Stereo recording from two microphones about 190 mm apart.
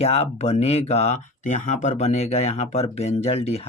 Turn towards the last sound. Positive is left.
turn(degrees=35)  # may be behind; listen again after turning